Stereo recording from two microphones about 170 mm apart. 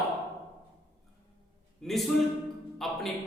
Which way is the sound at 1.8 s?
Centre (ahead or behind).